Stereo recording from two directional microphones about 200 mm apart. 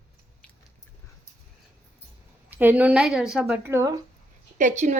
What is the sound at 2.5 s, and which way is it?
A woman's voice, 10° right (ahead or behind).